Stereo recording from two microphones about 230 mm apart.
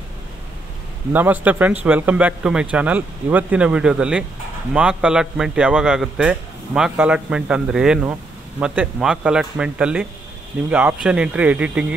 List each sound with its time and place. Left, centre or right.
1.1 s a man's voice: centre